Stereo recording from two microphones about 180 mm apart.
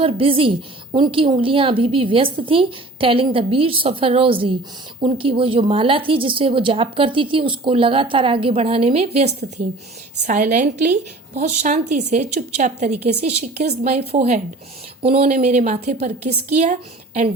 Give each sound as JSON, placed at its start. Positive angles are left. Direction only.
{"t": 0.0, "sound": "a woman's voice", "side_deg": -30}